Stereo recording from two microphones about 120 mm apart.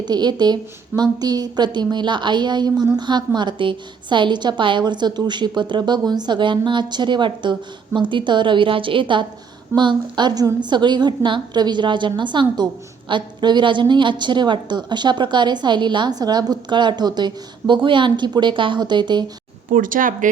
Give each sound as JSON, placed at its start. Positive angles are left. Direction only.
{"t": 0.0, "sound": "a woman's voice", "side_deg": -35}
{"t": 19.7, "sound": "speech", "side_deg": -90}